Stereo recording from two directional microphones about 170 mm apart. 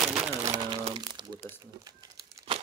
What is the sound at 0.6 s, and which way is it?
Crumpling, 30° right (ahead or behind).